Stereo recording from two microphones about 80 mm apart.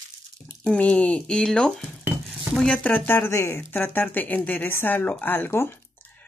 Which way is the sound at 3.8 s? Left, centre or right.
Left.